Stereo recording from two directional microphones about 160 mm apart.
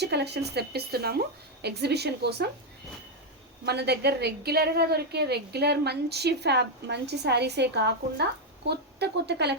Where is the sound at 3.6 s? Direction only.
90° right.